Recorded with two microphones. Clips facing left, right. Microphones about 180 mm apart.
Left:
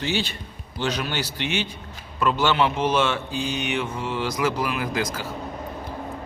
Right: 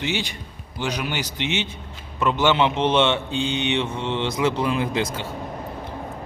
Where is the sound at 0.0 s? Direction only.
15° right (ahead or behind).